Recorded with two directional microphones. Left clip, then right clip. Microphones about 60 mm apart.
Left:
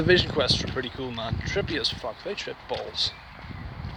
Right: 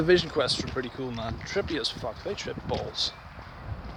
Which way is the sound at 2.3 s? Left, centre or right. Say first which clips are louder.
Left 1 dB; right.